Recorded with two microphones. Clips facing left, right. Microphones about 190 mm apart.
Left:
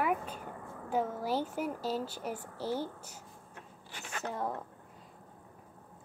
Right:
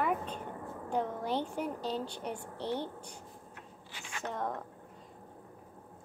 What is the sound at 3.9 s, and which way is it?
Zipper, 40° left (ahead or behind).